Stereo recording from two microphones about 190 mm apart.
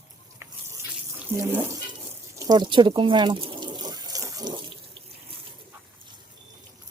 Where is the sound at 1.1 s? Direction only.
10° right (ahead or behind).